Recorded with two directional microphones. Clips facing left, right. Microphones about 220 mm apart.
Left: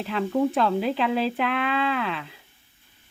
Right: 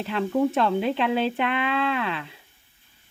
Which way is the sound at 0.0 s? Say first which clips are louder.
Even; centre (ahead or behind).